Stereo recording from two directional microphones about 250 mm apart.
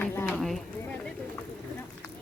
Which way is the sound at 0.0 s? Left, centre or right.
Centre.